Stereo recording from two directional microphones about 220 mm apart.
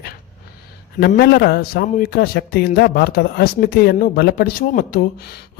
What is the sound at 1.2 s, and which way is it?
A man's voice, 45° left (ahead or behind).